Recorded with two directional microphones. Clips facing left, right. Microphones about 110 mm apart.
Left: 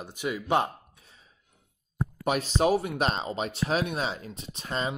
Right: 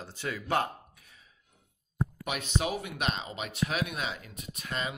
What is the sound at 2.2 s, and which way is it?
Speech, 35° left (ahead or behind).